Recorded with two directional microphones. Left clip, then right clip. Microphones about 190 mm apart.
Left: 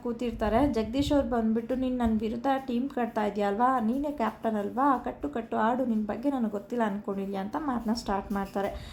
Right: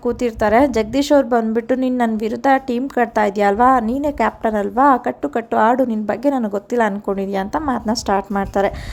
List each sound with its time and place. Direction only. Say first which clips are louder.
0.0 s a woman's voice: right 13 dB; 40° right (ahead or behind)